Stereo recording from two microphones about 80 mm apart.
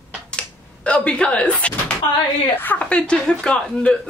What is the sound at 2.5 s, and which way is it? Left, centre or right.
A woman's voice, left.